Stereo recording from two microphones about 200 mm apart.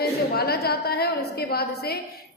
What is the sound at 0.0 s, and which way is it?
A woman's voice, 50° left (ahead or behind).